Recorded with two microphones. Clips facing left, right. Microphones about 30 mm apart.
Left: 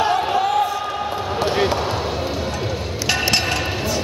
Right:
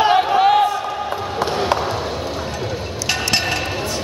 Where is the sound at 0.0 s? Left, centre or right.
Right.